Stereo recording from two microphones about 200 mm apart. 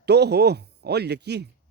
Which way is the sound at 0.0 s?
55° right (ahead or behind).